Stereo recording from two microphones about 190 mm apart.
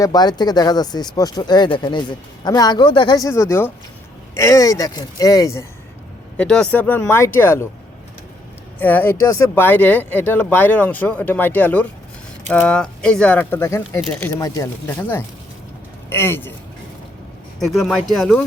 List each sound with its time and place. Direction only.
0.0 s speech: 20° left (ahead or behind)
6.3 s speech: 5° left (ahead or behind)
8.8 s speech: 10° left (ahead or behind)
17.6 s speech: centre (ahead or behind)